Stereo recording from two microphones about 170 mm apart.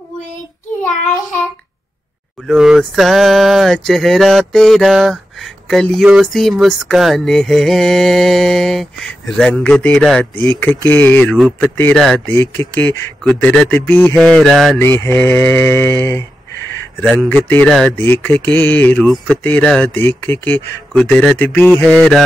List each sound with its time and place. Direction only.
2.4 s a sound: 5° right (ahead or behind)
10.9 s speech: 10° left (ahead or behind)
11.3 s a sound: centre (ahead or behind)
11.8 s speech: 5° left (ahead or behind)
14.8 s speech: 15° left (ahead or behind)
17.0 s speech: 5° left (ahead or behind)